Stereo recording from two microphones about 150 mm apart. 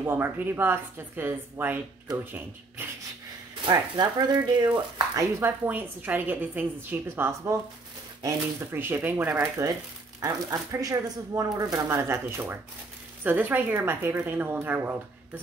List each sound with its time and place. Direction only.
0.0 s a woman's voice: 15° right (ahead or behind)
3.6 s speech: 30° right (ahead or behind)
5.7 s a woman's voice: 10° right (ahead or behind)